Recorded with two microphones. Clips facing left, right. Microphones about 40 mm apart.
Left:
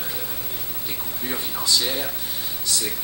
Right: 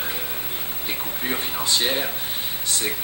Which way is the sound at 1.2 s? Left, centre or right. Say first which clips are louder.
Right 2 dB; right.